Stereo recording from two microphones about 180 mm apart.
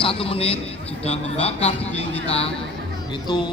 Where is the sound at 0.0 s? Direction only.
30° left (ahead or behind).